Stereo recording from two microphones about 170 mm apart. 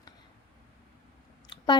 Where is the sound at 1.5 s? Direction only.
25° left (ahead or behind).